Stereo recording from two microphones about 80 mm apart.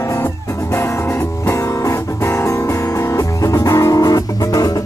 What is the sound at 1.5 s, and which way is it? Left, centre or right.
Music, left.